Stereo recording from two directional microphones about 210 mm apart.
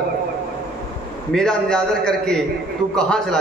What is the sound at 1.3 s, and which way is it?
A man's voice, 5° left (ahead or behind).